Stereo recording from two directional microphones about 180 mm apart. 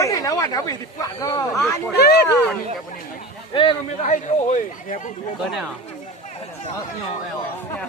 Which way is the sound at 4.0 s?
45° left (ahead or behind).